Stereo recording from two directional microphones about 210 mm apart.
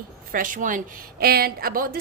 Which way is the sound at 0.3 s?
40° right (ahead or behind).